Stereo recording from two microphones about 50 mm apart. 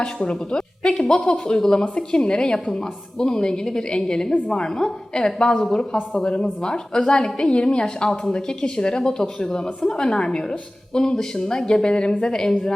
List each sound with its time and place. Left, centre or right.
0.0 s a woman's voice: centre